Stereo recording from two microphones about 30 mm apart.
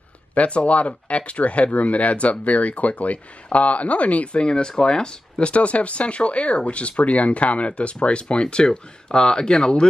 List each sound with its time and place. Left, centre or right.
0.3 s speech: left
4.3 s speech: left